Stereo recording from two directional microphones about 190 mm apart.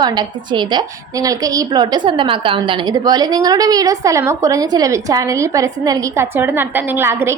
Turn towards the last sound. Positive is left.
turn(degrees=-10)  # may be behind; listen again after turning